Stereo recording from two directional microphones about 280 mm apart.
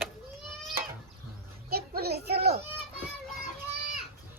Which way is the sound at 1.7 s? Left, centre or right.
Right.